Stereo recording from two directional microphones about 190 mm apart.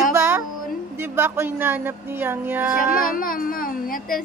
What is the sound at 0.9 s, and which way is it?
Speech, 10° right (ahead or behind).